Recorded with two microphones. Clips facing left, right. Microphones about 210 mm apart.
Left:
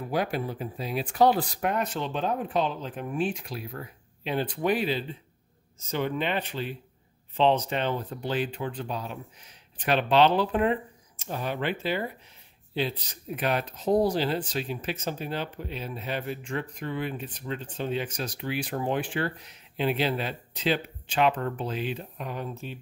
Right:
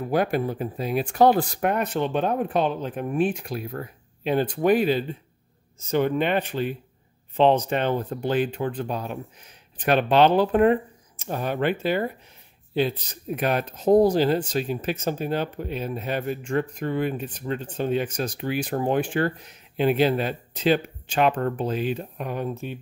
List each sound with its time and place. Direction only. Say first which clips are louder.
0.0 s speech: right 5 dB; 50° right (ahead or behind)